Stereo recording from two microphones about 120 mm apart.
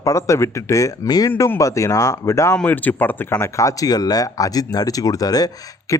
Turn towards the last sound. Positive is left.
turn(degrees=30)  # may be behind; listen again after turning